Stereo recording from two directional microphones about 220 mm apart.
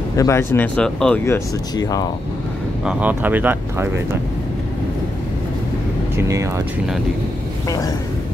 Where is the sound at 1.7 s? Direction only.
15° left (ahead or behind).